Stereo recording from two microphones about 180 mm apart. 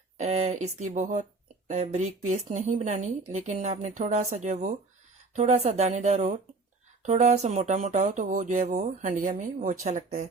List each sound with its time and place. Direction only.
0.2 s speech: 40° right (ahead or behind)